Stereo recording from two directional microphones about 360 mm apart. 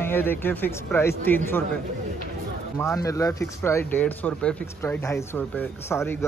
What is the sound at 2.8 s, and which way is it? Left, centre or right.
Speech, centre.